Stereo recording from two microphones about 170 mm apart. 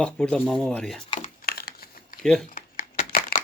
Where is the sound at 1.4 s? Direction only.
65° left (ahead or behind).